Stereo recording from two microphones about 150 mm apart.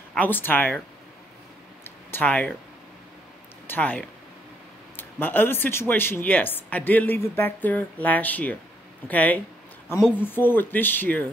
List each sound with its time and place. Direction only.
0.1 s speech: 10° left (ahead or behind)
2.0 s speech: 10° left (ahead or behind)
3.6 s speech: 10° left (ahead or behind)